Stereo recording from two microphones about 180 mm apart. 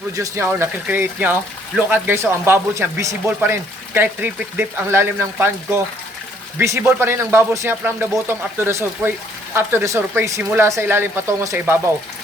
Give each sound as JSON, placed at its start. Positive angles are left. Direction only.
{"t": 0.2, "sound": "speech", "side_deg": -15}